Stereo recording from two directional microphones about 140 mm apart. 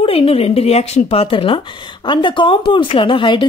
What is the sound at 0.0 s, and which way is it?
Speech, 45° left (ahead or behind).